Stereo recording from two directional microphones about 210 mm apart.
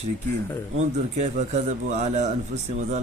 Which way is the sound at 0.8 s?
30° right (ahead or behind).